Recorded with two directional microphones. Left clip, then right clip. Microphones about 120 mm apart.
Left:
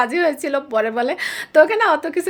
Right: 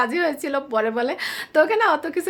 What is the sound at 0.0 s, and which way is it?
A woman's voice, 30° left (ahead or behind).